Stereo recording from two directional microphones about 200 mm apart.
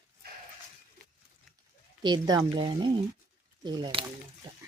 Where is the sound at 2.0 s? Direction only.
20° right (ahead or behind).